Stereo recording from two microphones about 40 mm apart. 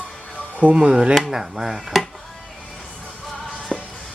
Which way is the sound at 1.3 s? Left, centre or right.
Centre.